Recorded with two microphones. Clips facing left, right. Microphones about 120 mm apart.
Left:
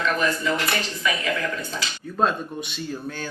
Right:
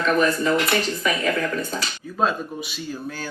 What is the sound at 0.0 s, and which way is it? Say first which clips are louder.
Speech: right 4 dB; 45° right (ahead or behind).